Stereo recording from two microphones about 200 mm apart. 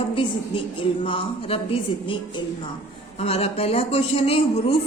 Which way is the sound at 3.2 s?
30° left (ahead or behind).